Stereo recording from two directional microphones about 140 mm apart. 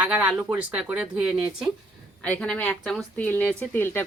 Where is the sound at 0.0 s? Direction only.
10° right (ahead or behind).